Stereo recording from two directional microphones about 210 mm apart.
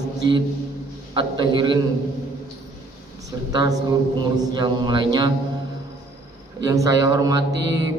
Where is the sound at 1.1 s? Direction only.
20° right (ahead or behind).